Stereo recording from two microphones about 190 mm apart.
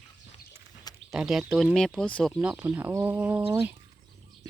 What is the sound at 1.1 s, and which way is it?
Speech, 5° right (ahead or behind).